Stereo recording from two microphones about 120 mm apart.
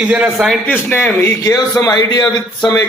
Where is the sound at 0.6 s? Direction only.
15° left (ahead or behind).